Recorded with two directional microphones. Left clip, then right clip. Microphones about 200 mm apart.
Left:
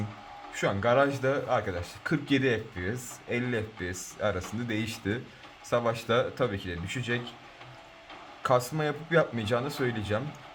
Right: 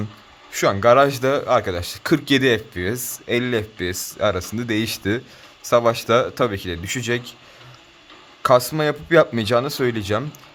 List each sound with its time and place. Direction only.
0.5 s speech: 50° right (ahead or behind)
8.4 s speech: 40° right (ahead or behind)